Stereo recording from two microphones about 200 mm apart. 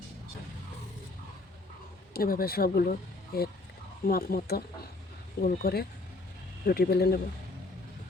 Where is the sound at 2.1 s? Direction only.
45° left (ahead or behind).